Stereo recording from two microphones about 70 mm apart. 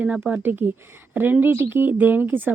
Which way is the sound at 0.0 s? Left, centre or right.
Right.